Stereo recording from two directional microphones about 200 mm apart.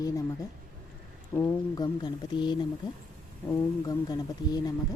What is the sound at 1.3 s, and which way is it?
Speech, 15° left (ahead or behind).